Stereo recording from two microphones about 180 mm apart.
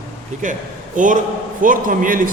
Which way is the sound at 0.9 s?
45° right (ahead or behind).